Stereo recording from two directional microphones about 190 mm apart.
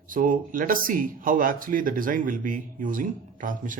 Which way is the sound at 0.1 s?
45° right (ahead or behind).